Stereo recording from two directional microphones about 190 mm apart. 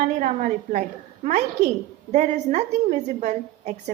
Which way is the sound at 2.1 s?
40° right (ahead or behind).